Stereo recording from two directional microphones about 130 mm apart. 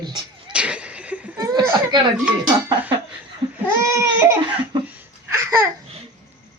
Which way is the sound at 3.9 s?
20° right (ahead or behind).